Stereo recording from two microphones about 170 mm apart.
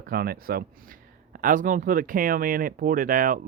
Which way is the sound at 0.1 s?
65° right (ahead or behind).